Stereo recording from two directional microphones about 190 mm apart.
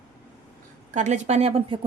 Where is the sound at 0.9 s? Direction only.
40° right (ahead or behind).